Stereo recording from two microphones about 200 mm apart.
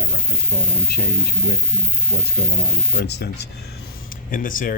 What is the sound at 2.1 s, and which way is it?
Speech, 50° left (ahead or behind).